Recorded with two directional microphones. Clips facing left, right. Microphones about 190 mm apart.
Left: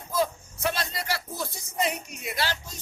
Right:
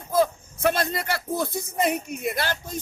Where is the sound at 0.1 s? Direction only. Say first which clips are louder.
Right 5 dB; 55° right (ahead or behind).